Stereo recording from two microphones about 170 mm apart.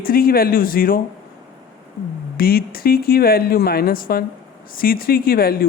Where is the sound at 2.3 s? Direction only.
60° left (ahead or behind).